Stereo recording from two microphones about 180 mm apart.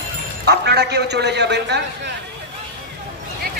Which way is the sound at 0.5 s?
65° right (ahead or behind).